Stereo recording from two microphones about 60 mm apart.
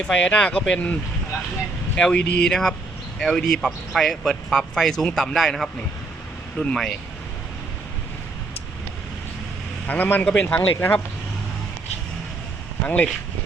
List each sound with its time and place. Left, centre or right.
0.1 s speech: centre
2.0 s speech: centre
6.6 s speech: centre
9.8 s a man's voice: left
12.8 s speech: left